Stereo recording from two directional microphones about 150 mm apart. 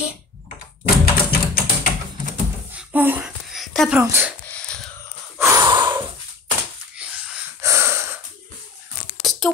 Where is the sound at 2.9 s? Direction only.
10° right (ahead or behind).